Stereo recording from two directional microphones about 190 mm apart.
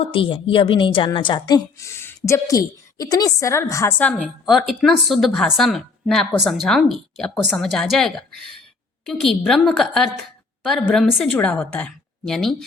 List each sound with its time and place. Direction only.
0.1 s a woman's voice: 30° left (ahead or behind); by 4.1 s 10° left (ahead or behind)
4.2 s speech: centre (ahead or behind)